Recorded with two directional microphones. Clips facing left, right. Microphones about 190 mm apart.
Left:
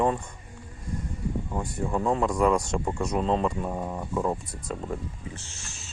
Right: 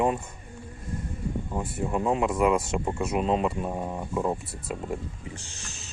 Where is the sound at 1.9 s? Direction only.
15° right (ahead or behind).